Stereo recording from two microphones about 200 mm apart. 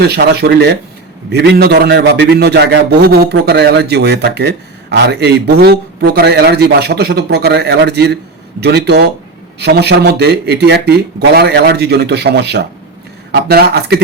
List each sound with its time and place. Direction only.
0.0 s a man's voice: 55° right (ahead or behind)